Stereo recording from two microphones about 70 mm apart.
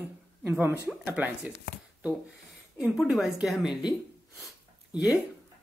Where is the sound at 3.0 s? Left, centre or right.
Centre.